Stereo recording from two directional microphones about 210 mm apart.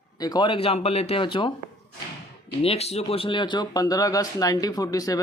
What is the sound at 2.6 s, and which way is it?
Speech, 30° left (ahead or behind).